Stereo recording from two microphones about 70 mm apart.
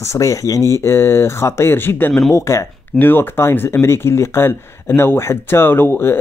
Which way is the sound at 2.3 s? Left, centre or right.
Left.